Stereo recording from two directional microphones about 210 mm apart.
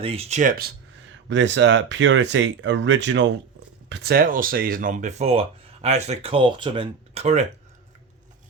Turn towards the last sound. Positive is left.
turn(degrees=-30)  # may be behind; listen again after turning